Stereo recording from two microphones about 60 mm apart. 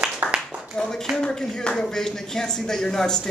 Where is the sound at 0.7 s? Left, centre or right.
Centre.